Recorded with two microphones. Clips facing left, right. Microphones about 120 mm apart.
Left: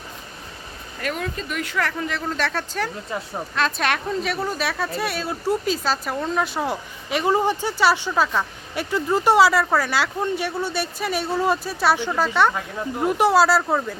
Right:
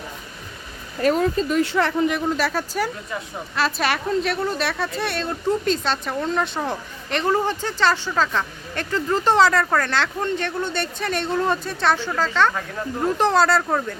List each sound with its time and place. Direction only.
0.9 s speech: 35° right (ahead or behind)
2.3 s speech: 10° right (ahead or behind)